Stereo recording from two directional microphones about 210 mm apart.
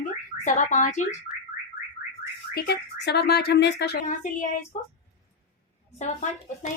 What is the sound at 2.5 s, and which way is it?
Speech, 50° left (ahead or behind).